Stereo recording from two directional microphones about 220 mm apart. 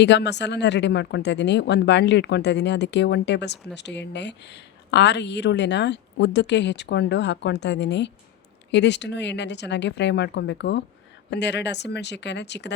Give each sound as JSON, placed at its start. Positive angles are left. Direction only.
{"t": 0.0, "sound": "speech", "side_deg": 50}